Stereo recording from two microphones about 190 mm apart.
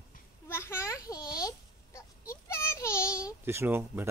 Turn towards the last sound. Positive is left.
turn(degrees=-10)  # may be behind; listen again after turning